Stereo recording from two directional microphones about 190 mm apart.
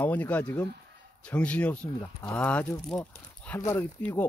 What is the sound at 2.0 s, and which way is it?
Speech, 20° left (ahead or behind).